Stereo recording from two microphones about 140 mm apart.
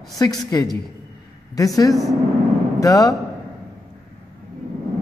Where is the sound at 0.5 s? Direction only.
25° left (ahead or behind).